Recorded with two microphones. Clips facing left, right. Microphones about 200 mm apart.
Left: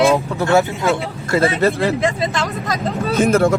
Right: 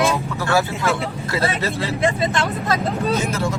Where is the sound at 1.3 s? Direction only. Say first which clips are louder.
Left 8 dB; 55° left (ahead or behind).